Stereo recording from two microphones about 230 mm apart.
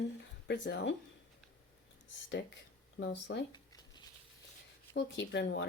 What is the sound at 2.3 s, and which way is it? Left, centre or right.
Speech, left.